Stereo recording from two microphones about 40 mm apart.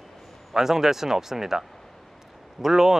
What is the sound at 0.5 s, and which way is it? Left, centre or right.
Speech, centre.